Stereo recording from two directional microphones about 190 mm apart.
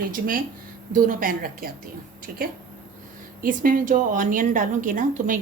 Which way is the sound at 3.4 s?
45° right (ahead or behind).